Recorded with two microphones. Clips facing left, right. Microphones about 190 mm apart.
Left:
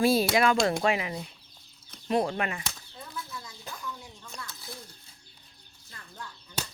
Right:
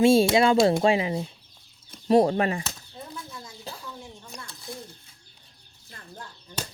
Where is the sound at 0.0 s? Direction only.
25° right (ahead or behind).